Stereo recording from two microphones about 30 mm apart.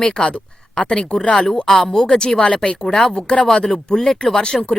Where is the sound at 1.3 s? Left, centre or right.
Centre.